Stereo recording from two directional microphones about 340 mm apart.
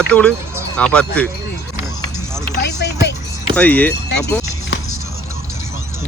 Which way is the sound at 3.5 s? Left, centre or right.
Centre.